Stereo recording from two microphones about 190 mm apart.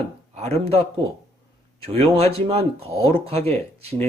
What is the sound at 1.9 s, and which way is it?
Speech, 30° right (ahead or behind).